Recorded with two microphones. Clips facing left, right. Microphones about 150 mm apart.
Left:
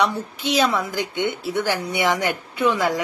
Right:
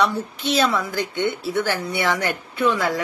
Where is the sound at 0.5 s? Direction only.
15° left (ahead or behind).